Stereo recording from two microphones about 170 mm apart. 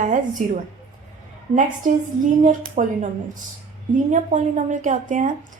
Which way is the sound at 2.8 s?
50° right (ahead or behind).